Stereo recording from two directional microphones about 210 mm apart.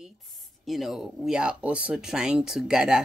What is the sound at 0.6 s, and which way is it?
Speech, centre (ahead or behind).